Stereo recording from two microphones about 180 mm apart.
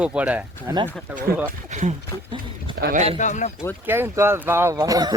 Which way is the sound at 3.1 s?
40° left (ahead or behind).